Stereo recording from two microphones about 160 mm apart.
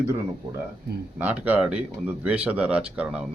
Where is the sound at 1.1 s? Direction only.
10° right (ahead or behind).